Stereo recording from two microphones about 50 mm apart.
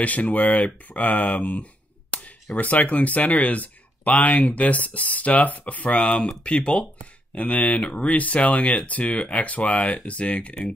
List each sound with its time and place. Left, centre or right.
0.0 s speech: left